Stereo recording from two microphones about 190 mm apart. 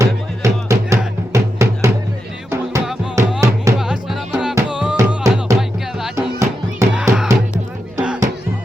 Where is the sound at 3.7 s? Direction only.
5° right (ahead or behind).